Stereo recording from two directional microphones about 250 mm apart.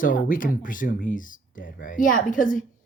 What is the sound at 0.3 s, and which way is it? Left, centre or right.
Speech, left.